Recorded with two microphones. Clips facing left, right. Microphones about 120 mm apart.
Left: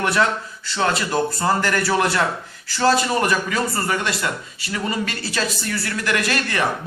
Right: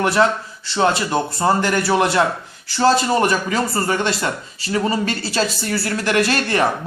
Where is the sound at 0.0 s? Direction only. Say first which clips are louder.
Right 3 dB; 30° right (ahead or behind).